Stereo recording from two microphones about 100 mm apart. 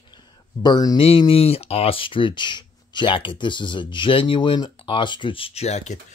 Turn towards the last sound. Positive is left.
turn(degrees=90)